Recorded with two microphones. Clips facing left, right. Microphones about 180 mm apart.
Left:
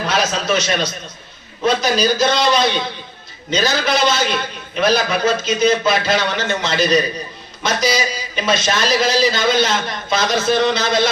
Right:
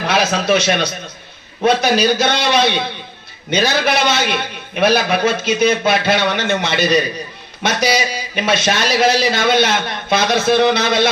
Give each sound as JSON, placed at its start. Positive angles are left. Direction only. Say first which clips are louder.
{"t": 0.1, "sound": "a man's voice", "louder": "right 4 dB", "side_deg": -60}